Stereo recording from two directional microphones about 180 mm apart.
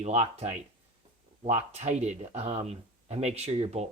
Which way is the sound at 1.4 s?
40° right (ahead or behind).